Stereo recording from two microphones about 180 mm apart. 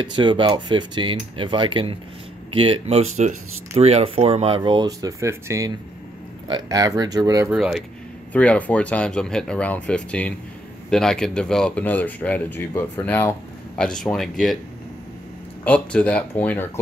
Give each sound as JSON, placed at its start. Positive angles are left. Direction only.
{"t": 0.0, "sound": "speech", "side_deg": -25}
{"t": 7.5, "sound": "speech", "side_deg": -5}
{"t": 8.3, "sound": "speech", "side_deg": 10}
{"t": 15.6, "sound": "speech", "side_deg": 10}